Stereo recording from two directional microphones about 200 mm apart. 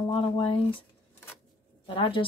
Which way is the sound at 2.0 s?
25° left (ahead or behind).